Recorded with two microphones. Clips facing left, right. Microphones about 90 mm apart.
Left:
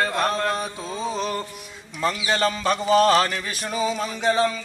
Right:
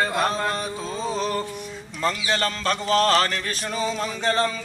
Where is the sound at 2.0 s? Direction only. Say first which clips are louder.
Left 2 dB; 5° left (ahead or behind).